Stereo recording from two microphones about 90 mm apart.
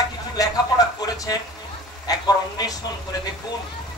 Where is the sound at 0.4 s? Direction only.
40° left (ahead or behind).